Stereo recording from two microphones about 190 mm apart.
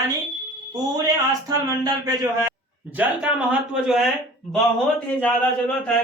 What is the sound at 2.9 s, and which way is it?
A man's voice, 10° right (ahead or behind).